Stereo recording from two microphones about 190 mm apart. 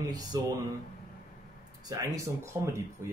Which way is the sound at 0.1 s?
20° right (ahead or behind).